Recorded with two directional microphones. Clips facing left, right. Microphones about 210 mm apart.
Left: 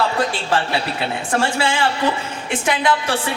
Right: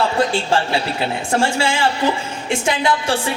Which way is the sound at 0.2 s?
25° right (ahead or behind).